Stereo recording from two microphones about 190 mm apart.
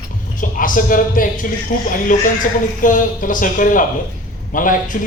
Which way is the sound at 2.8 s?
45° left (ahead or behind).